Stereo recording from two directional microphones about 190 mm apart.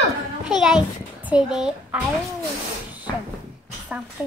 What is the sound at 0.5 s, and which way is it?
A child's voice, centre (ahead or behind).